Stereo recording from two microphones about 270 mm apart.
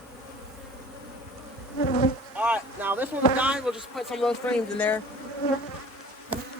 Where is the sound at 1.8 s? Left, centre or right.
Left.